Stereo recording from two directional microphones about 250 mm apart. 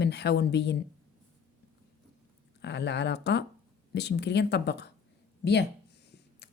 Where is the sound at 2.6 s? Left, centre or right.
Left.